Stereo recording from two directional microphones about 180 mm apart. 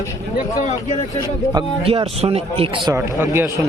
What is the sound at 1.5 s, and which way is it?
A man's voice, 30° right (ahead or behind).